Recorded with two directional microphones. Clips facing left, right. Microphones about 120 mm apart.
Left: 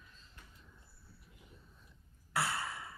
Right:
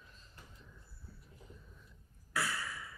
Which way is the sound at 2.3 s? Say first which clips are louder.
Left 2 dB; 30° left (ahead or behind).